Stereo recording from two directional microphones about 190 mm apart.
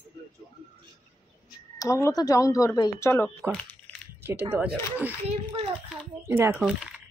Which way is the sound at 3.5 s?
5° left (ahead or behind).